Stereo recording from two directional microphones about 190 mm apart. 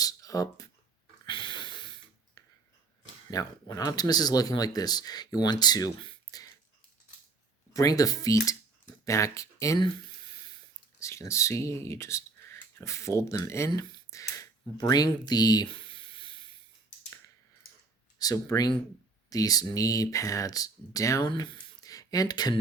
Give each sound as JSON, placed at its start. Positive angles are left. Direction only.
{"t": 0.0, "sound": "a sound", "side_deg": 20}
{"t": 1.3, "sound": "snort", "side_deg": 25}
{"t": 3.2, "sound": "speech", "side_deg": 20}
{"t": 7.8, "sound": "speech", "side_deg": 20}
{"t": 11.0, "sound": "speech", "side_deg": 15}
{"t": 18.2, "sound": "speech", "side_deg": 20}